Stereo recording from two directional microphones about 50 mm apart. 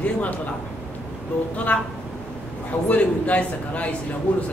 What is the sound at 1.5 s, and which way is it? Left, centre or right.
Speech, left.